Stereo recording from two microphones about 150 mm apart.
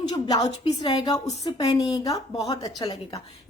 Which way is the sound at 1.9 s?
25° left (ahead or behind).